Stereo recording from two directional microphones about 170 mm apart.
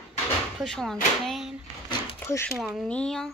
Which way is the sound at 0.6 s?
Centre (ahead or behind).